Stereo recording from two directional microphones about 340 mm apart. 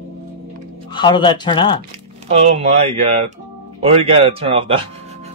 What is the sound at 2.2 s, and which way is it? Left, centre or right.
Speech, centre.